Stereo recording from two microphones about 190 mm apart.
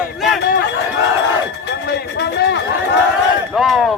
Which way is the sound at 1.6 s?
65° left (ahead or behind).